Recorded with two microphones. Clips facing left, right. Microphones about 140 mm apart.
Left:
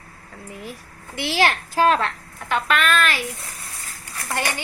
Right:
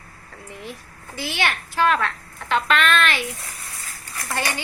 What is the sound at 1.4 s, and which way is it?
Speech, 35° left (ahead or behind).